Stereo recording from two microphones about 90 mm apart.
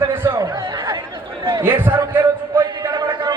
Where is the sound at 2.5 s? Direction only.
50° right (ahead or behind).